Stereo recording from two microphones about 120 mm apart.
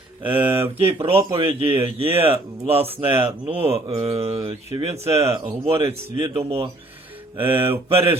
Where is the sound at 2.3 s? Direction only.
55° right (ahead or behind).